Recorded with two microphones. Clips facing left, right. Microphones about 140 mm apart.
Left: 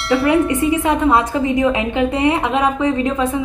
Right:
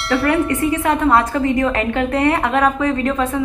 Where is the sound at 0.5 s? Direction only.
15° left (ahead or behind).